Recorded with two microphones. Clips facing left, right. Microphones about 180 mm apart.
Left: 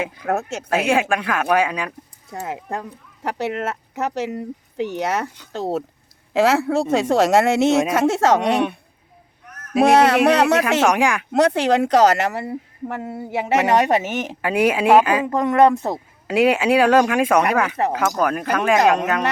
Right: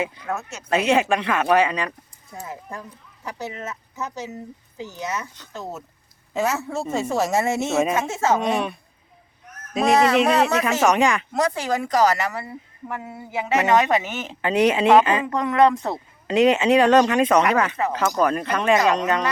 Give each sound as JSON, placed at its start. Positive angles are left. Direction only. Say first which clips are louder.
{"t": 0.0, "sound": "speech", "louder": "left 4 dB", "side_deg": 60}
{"t": 0.9, "sound": "speech", "louder": "right 1 dB", "side_deg": 5}
{"t": 2.3, "sound": "speech", "louder": "left 7 dB", "side_deg": 70}
{"t": 10.6, "sound": "speech", "louder": "left 1 dB", "side_deg": 10}
{"t": 11.3, "sound": "speech", "louder": "left 6 dB", "side_deg": 70}
{"t": 13.0, "sound": "a sound", "louder": "left 7 dB", "side_deg": 40}
{"t": 14.0, "sound": "speech", "louder": "left 6 dB", "side_deg": 55}
{"t": 14.4, "sound": "speech", "louder": "even", "side_deg": 10}
{"t": 15.4, "sound": "speech", "louder": "left 3 dB", "side_deg": 45}
{"t": 16.2, "sound": "speech", "louder": "even", "side_deg": 10}